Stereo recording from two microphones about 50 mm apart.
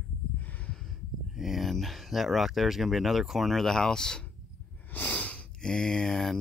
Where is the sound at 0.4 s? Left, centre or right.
Left.